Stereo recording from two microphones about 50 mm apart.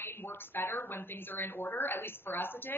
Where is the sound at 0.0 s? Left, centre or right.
Left.